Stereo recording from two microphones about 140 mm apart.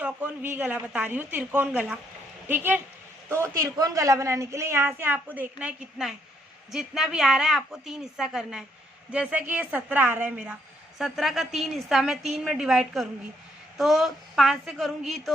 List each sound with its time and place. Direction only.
0.0 s a woman's voice: 10° right (ahead or behind)